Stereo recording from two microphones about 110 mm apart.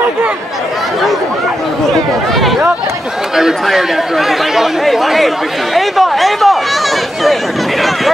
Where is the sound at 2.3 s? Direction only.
Centre (ahead or behind).